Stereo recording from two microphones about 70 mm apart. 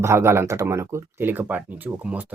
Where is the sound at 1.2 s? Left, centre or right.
Right.